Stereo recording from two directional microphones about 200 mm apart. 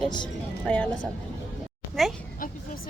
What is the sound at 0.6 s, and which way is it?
Speech, 5° left (ahead or behind).